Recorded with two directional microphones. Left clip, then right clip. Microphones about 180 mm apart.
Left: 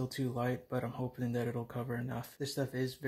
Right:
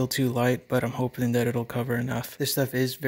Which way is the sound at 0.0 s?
55° right (ahead or behind).